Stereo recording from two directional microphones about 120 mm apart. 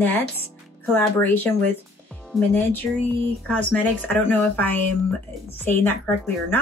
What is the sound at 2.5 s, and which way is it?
Speech, 15° left (ahead or behind).